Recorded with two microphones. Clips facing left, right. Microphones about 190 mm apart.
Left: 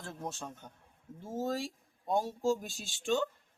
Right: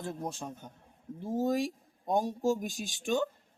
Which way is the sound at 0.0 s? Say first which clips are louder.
Right 4 dB; 15° right (ahead or behind).